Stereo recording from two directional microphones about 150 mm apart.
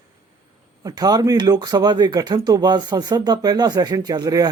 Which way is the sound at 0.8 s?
25° right (ahead or behind).